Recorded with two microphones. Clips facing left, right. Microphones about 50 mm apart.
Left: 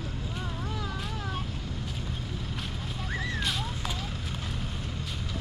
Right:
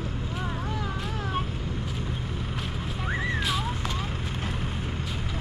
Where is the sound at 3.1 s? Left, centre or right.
Right.